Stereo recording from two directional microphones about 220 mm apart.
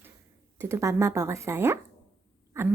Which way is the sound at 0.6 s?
15° right (ahead or behind).